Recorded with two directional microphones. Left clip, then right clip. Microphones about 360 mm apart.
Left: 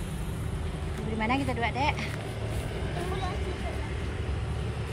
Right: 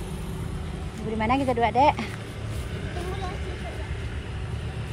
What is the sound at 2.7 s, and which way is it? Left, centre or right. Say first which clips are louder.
Vehicle: even; left.